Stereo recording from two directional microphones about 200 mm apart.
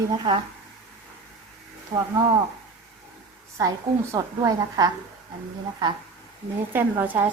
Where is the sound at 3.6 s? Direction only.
15° right (ahead or behind).